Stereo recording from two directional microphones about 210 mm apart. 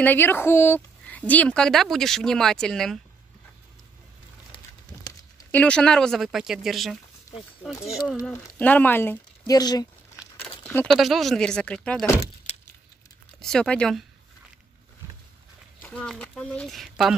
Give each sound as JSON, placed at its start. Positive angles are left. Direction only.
{"t": 0.0, "sound": "a woman's voice", "side_deg": 10}
{"t": 5.5, "sound": "a woman's voice", "side_deg": 5}
{"t": 7.3, "sound": "a sound", "side_deg": 15}
{"t": 8.5, "sound": "speech", "side_deg": 5}
{"t": 10.6, "sound": "a woman's voice", "side_deg": 10}
{"t": 12.5, "sound": "keys jangling", "side_deg": 30}
{"t": 13.4, "sound": "a woman's voice", "side_deg": 5}
{"t": 15.8, "sound": "a woman's voice", "side_deg": 5}